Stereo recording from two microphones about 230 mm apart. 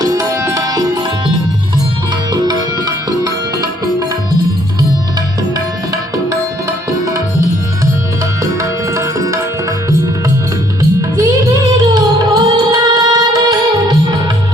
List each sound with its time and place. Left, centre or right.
0.0 s music: centre
8.9 s music: centre
11.2 s music: centre